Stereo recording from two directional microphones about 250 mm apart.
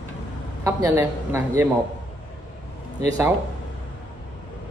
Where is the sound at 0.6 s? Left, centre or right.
Centre.